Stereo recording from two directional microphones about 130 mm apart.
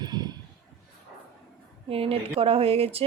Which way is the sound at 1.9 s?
45° right (ahead or behind).